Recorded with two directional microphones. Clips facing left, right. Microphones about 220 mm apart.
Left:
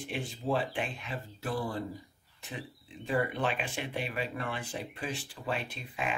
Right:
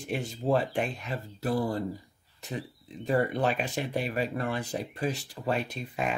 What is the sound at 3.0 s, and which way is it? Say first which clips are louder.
Speech: right 4 dB; 40° right (ahead or behind).